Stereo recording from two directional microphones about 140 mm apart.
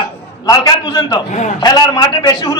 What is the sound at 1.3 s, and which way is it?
Speech, 60° left (ahead or behind).